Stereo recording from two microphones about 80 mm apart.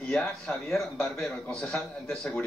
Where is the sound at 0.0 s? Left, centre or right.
Left.